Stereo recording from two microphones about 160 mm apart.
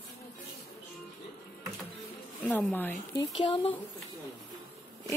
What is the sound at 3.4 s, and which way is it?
Speech, 35° left (ahead or behind).